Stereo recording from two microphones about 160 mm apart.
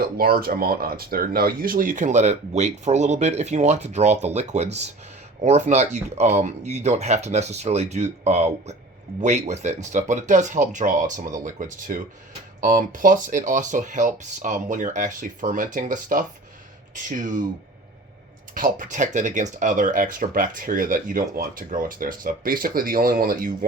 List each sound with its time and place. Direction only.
0.0 s speech: 65° right (ahead or behind)
18.5 s speech: 60° right (ahead or behind)